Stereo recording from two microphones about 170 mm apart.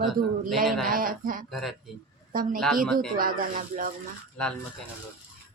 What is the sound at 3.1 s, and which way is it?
Speech, 55° right (ahead or behind).